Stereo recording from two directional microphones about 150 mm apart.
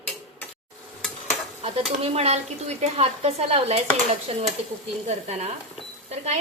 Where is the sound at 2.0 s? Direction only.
45° right (ahead or behind).